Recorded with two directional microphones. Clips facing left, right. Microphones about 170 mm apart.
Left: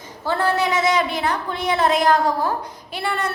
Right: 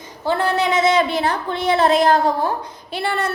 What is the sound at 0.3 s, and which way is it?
A woman's voice, 20° right (ahead or behind).